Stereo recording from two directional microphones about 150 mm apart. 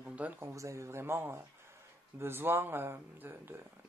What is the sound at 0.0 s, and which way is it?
Speech, 10° right (ahead or behind).